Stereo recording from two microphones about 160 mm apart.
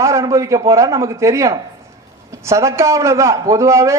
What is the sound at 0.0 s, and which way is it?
A man's voice, 20° right (ahead or behind).